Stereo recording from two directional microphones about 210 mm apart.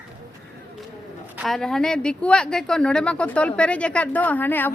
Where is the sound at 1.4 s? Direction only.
Centre (ahead or behind).